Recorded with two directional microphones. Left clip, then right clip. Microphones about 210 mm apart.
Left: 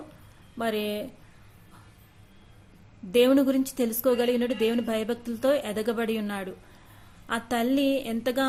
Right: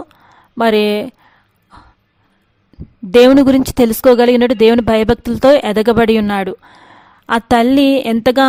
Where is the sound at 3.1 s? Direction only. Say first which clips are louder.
Right 14 dB; 45° right (ahead or behind).